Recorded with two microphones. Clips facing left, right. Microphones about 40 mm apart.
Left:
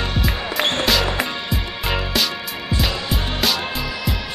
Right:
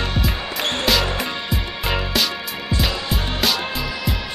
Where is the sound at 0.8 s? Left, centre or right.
Centre.